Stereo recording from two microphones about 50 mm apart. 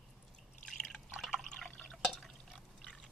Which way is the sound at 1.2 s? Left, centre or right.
Centre.